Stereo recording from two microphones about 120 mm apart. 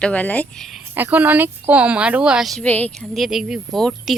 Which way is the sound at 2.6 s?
15° left (ahead or behind).